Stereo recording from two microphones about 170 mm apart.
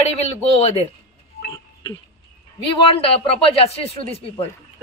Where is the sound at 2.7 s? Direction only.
30° left (ahead or behind).